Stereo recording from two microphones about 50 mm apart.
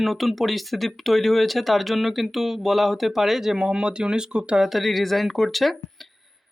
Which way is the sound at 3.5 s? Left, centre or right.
Centre.